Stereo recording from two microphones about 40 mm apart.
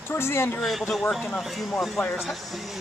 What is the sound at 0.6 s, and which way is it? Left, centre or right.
Speech, centre.